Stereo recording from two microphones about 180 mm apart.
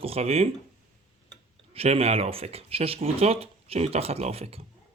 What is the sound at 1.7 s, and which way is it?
A man's voice, 35° right (ahead or behind).